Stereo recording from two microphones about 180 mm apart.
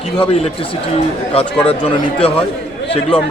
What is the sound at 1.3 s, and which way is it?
Speech, 30° left (ahead or behind).